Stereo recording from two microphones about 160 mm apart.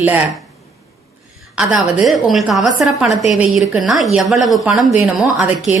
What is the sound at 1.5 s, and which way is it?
A woman's voice, 5° right (ahead or behind).